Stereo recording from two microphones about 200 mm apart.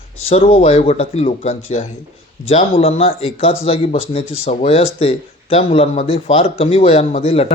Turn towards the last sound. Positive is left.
turn(degrees=30)  # may be behind; listen again after turning